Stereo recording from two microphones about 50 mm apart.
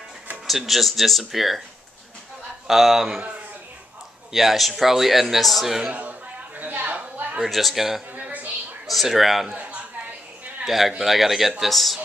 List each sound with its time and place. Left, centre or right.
0.5 s a man's voice: centre
2.7 s a man's voice: centre
4.3 s a man's voice: centre
6.6 s a sound: right
7.4 s a man's voice: centre
8.2 s a sound: right
8.8 s a man's voice: centre
10.6 s a man's voice: centre